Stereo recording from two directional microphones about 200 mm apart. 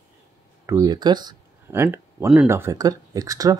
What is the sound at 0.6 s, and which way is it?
Speech, 20° right (ahead or behind).